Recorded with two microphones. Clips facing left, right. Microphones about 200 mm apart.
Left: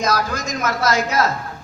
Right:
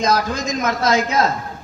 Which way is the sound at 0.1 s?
20° right (ahead or behind).